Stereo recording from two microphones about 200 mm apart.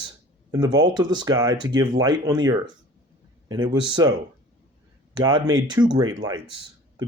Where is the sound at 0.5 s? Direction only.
20° right (ahead or behind).